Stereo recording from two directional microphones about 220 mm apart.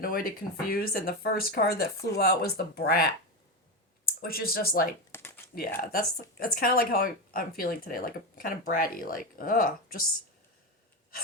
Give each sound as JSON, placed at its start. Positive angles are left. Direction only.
{"t": 0.0, "sound": "speech", "side_deg": 40}